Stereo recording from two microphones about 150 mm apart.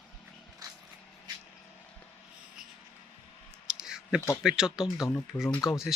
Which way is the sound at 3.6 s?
5° right (ahead or behind).